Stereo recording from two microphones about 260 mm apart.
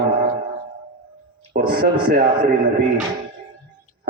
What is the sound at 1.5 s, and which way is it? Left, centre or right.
Speech, right.